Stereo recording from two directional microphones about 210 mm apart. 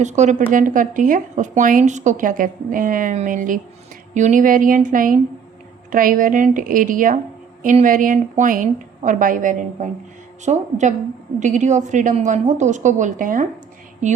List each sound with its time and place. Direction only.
0.0 s a woman's voice: 35° right (ahead or behind)